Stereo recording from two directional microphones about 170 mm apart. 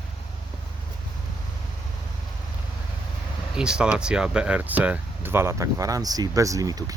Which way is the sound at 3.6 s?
5° right (ahead or behind).